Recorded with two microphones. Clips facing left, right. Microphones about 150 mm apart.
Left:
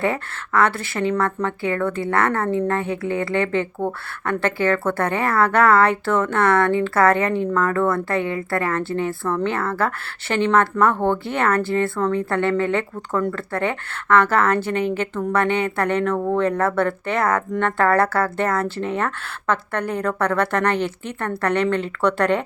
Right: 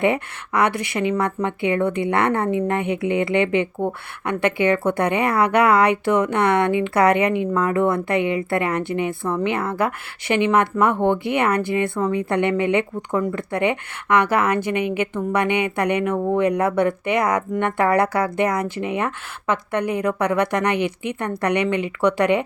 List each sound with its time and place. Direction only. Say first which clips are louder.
0.0 s a woman's voice: right 3 dB; 20° right (ahead or behind)